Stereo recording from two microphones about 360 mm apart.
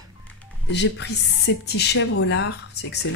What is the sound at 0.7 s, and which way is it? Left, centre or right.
Speech, left.